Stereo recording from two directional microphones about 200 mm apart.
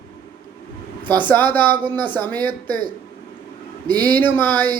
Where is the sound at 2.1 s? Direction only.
10° left (ahead or behind).